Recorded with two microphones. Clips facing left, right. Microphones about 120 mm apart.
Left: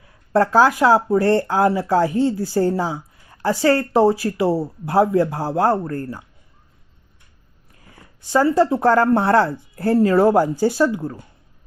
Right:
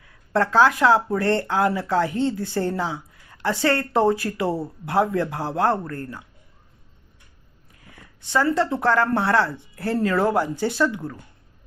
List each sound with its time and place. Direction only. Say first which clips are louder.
0.0 s speech: left 5 dB; 35° left (ahead or behind)
8.3 s speech: left 5 dB; 35° left (ahead or behind)